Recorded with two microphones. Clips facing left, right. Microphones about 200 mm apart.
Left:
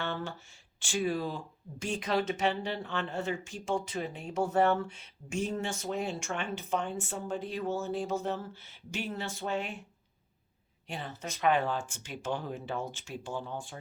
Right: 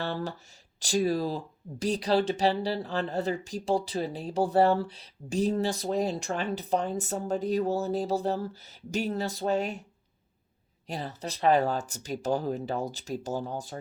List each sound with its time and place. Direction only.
0.0 s a sound: 35° right (ahead or behind)
0.8 s speech: 40° right (ahead or behind)
10.8 s speech: 40° right (ahead or behind)